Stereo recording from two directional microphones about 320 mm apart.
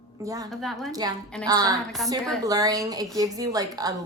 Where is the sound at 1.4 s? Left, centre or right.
Centre.